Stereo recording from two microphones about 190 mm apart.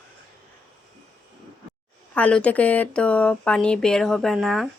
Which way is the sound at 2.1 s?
5° left (ahead or behind).